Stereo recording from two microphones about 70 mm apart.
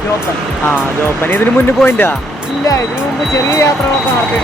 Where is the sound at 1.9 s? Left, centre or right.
Left.